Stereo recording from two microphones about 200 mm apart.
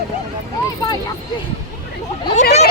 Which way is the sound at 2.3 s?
35° left (ahead or behind).